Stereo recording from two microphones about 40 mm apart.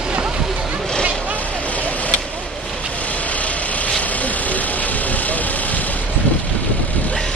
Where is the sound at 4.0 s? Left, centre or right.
Left.